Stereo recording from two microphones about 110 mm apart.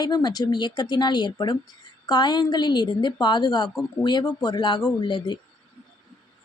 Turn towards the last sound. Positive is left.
turn(degrees=45)  # may be behind; listen again after turning